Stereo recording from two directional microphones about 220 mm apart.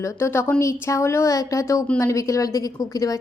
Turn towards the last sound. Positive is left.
turn(degrees=15)  # may be behind; listen again after turning